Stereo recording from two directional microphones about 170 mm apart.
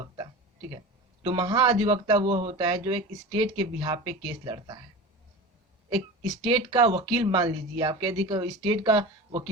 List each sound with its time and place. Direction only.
1.2 s speech: 30° right (ahead or behind)
6.2 s speech: centre (ahead or behind)
6.5 s speech: 30° right (ahead or behind)